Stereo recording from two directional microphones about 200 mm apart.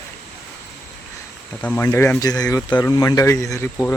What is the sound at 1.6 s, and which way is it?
Speech, 10° left (ahead or behind).